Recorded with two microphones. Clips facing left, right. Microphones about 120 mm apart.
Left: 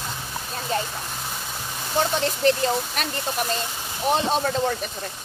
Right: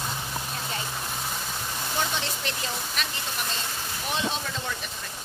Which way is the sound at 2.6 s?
45° left (ahead or behind).